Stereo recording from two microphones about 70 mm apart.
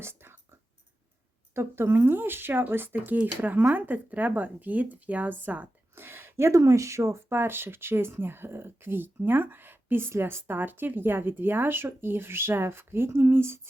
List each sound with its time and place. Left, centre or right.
0.0 s speech: right
1.5 s speech: right
5.9 s speech: right